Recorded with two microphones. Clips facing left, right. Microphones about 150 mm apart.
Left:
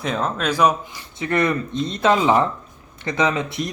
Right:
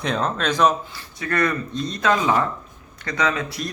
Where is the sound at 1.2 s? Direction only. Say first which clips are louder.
Left 2 dB; 20° left (ahead or behind).